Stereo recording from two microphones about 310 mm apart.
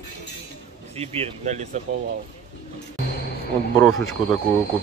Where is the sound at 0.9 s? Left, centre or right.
Centre.